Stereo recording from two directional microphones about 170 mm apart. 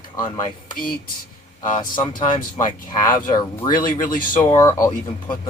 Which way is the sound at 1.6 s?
25° left (ahead or behind).